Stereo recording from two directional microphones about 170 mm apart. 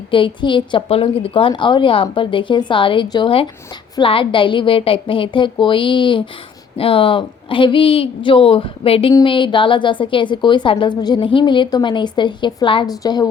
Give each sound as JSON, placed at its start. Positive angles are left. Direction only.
{"t": 0.1, "sound": "a woman's voice", "side_deg": 30}